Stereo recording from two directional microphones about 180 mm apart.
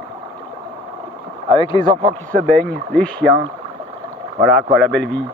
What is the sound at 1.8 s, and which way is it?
Speech, 40° right (ahead or behind).